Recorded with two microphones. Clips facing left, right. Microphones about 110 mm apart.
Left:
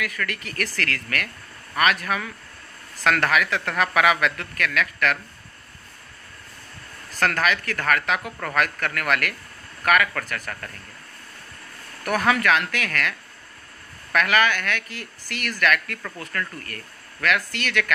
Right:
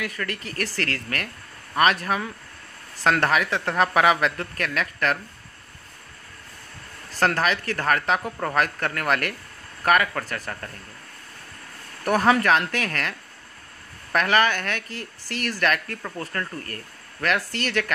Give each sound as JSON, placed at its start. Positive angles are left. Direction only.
{"t": 0.0, "sound": "speech", "side_deg": -30}
{"t": 7.2, "sound": "speech", "side_deg": -30}
{"t": 12.0, "sound": "speech", "side_deg": -30}
{"t": 14.1, "sound": "speech", "side_deg": -35}